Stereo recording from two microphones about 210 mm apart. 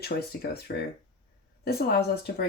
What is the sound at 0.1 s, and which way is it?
Speech, 45° left (ahead or behind).